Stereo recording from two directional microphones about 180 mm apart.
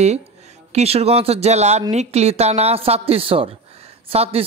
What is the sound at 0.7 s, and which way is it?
Speech, 35° right (ahead or behind).